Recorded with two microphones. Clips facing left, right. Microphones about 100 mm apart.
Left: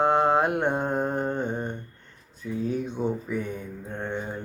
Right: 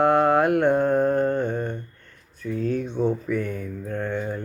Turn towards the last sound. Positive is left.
turn(degrees=20)  # may be behind; listen again after turning